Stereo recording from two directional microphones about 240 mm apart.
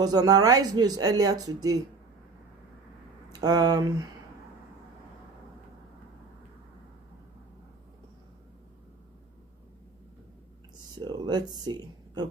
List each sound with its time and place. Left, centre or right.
0.0 s speech: centre
3.4 s speech: centre
10.9 s a sound: centre